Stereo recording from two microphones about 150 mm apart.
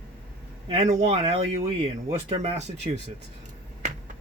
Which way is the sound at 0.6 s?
45° right (ahead or behind).